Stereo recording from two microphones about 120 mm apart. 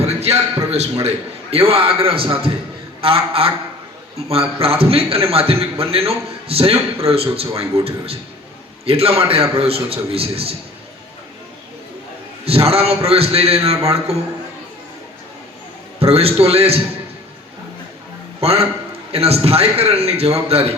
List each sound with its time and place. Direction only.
0.0 s a sound: 60° right (ahead or behind)
1.0 s a man's voice: 55° right (ahead or behind)
4.6 s a man's voice: 55° right (ahead or behind)
12.5 s a man's voice: 55° right (ahead or behind)
16.0 s a man's voice: 55° right (ahead or behind)
18.4 s a man's voice: 55° right (ahead or behind)